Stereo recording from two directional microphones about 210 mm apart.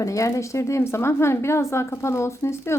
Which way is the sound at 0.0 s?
15° left (ahead or behind).